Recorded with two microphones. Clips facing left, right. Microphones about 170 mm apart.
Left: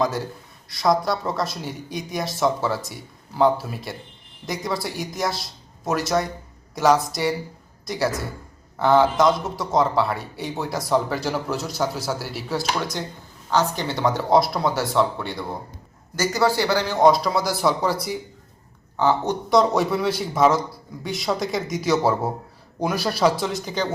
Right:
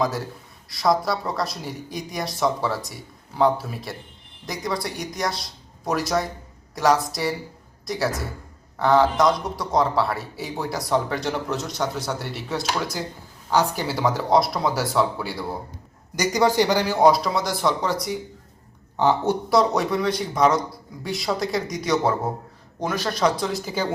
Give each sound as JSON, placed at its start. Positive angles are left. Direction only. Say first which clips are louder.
{"t": 0.0, "sound": "speech", "louder": "left 1 dB", "side_deg": 0}
{"t": 16.1, "sound": "speech", "louder": "right 1 dB", "side_deg": -15}
{"t": 17.0, "sound": "speech", "louder": "left 2 dB", "side_deg": 0}
{"t": 18.9, "sound": "speech", "louder": "right 1 dB", "side_deg": -15}